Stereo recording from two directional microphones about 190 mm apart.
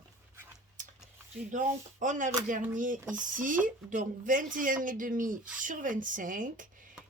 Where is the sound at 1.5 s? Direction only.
40° right (ahead or behind).